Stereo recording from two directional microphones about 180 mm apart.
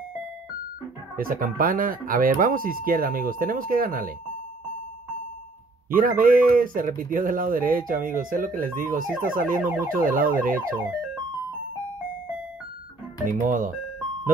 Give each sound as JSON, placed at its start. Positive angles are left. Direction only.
{"t": 1.1, "sound": "speech", "side_deg": -50}
{"t": 5.9, "sound": "speech", "side_deg": -50}
{"t": 9.6, "sound": "car alarm", "side_deg": -10}
{"t": 9.9, "sound": "speech", "side_deg": -50}
{"t": 13.3, "sound": "speech", "side_deg": -45}